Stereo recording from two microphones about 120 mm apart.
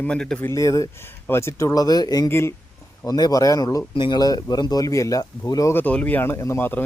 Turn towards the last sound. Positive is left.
turn(degrees=20)  # may be behind; listen again after turning